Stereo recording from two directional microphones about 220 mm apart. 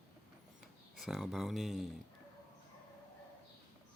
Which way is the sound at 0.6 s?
Centre (ahead or behind).